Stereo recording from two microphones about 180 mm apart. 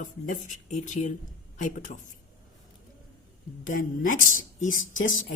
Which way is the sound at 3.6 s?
45° left (ahead or behind).